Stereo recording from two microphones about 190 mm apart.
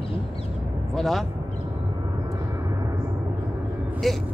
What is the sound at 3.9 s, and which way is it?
Vehicle, centre (ahead or behind).